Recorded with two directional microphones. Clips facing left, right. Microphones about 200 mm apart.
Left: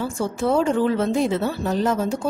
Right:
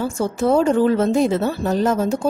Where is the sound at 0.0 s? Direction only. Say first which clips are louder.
Right 3 dB; 45° right (ahead or behind).